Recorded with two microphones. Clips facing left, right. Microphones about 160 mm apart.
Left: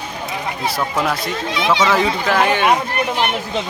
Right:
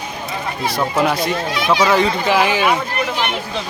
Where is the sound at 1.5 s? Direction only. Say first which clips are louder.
Even; 25° left (ahead or behind).